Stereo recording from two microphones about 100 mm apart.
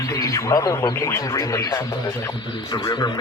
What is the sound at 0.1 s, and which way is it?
Speech, 35° left (ahead or behind).